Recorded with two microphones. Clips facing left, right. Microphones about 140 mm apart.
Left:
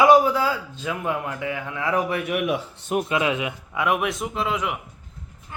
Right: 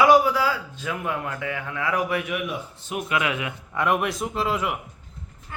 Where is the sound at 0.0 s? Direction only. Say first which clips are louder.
Left 1 dB; 20° left (ahead or behind).